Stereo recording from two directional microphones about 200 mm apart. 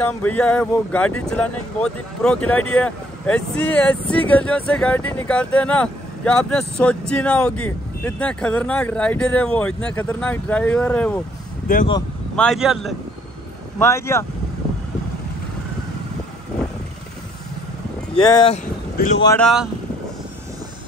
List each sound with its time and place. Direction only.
0.0 s speech: 5° left (ahead or behind)
11.6 s speech: 40° left (ahead or behind)
12.4 s speech: centre (ahead or behind)
13.7 s speech: 15° left (ahead or behind)
18.1 s speech: 20° left (ahead or behind)
19.3 s speech: centre (ahead or behind)